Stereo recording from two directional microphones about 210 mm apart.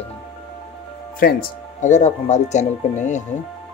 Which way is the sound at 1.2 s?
40° left (ahead or behind).